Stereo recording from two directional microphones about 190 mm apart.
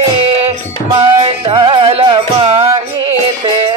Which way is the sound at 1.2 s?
25° right (ahead or behind).